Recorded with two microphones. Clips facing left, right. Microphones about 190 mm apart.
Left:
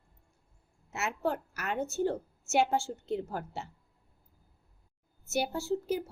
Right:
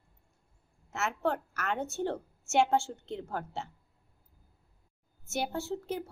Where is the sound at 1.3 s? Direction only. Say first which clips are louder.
Right 1 dB; 5° left (ahead or behind).